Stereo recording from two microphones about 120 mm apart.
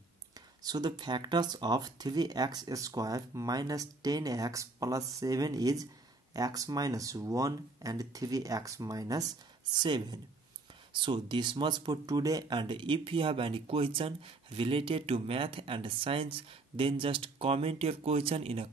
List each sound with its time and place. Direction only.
0.7 s speech: 35° right (ahead or behind); by 18.7 s 55° right (ahead or behind)